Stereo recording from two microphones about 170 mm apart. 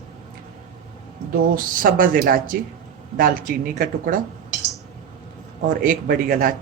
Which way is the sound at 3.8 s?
55° right (ahead or behind).